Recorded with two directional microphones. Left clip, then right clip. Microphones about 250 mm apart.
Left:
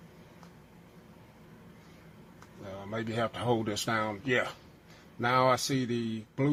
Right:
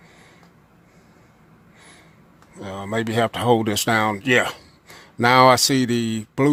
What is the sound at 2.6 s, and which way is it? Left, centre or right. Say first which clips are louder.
Speech: right 12 dB; right.